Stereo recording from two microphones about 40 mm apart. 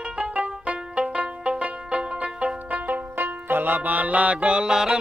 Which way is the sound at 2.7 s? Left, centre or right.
Right.